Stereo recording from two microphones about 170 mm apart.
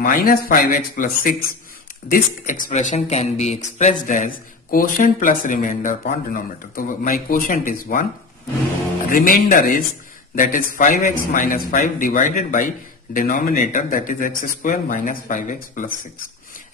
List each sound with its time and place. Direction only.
0.0 s speech: 55° left (ahead or behind)
4.6 s speech: 55° left (ahead or behind)
9.1 s speech: 55° left (ahead or behind)